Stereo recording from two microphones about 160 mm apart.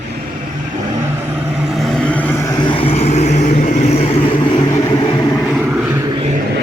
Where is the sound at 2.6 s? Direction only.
35° left (ahead or behind).